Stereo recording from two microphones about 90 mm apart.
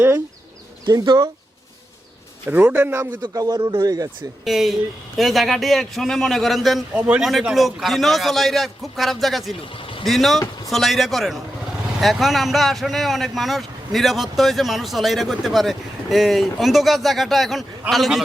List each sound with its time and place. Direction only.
0.9 s speech: 45° right (ahead or behind)
2.5 s a man's voice: 20° right (ahead or behind)
3.2 s speech: 45° right (ahead or behind)
4.4 s speech: centre (ahead or behind)
9.7 s vehicle: 75° left (ahead or behind)
10.1 s speech: centre (ahead or behind)